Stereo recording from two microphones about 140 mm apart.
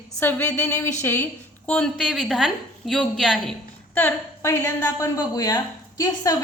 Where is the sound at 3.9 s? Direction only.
20° left (ahead or behind).